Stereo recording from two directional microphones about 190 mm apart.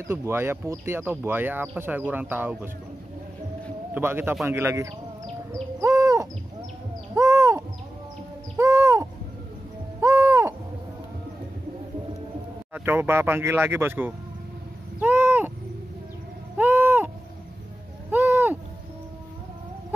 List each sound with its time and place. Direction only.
0.0 s speech: 15° right (ahead or behind)
3.9 s speech: 10° right (ahead or behind)
5.5 s owl: 15° right (ahead or behind)
7.2 s crow: 15° right (ahead or behind)
8.5 s owl: 15° right (ahead or behind)
9.9 s a sound: 15° right (ahead or behind)
12.7 s speech: 10° right (ahead or behind)
15.0 s a sound: 10° right (ahead or behind)
16.5 s owl: 10° right (ahead or behind)
18.1 s owl: 10° right (ahead or behind)